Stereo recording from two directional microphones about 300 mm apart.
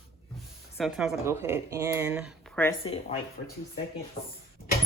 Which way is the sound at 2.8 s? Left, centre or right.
Centre.